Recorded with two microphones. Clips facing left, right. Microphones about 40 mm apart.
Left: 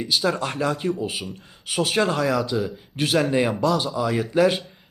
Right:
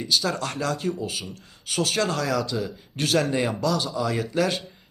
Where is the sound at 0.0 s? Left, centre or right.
Centre.